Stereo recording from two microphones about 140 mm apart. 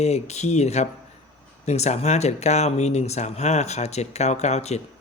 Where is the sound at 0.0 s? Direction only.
50° left (ahead or behind).